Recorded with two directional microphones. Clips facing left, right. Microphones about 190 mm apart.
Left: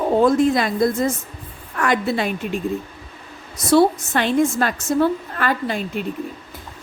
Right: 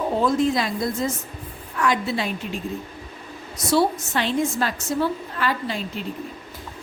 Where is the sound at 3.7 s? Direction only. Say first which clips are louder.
Left 5 dB; 55° left (ahead or behind).